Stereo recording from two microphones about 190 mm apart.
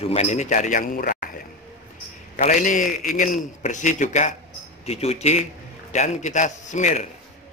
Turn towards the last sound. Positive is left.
turn(degrees=40)  # may be behind; listen again after turning